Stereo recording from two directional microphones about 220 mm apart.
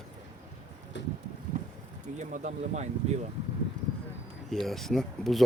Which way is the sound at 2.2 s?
35° right (ahead or behind).